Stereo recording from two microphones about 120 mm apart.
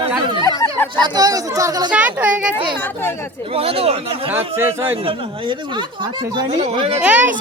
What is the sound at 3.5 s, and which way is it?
Speech, 55° right (ahead or behind).